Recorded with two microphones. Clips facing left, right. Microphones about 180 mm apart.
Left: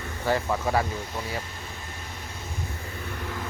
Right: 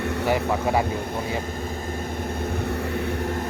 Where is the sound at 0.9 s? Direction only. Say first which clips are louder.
Right 6 dB; 55° right (ahead or behind).